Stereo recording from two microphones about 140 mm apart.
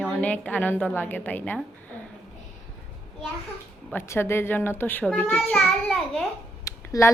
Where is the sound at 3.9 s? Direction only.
15° left (ahead or behind).